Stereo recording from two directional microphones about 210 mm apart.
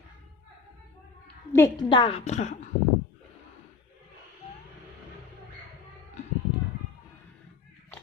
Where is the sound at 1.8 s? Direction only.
25° left (ahead or behind).